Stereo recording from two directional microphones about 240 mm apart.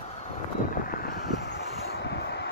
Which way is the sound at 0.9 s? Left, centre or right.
Left.